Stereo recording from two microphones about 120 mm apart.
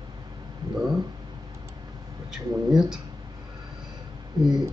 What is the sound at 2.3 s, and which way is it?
Speech, 5° right (ahead or behind).